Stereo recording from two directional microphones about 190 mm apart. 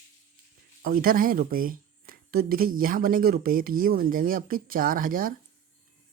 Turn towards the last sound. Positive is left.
turn(degrees=-45)  # may be behind; listen again after turning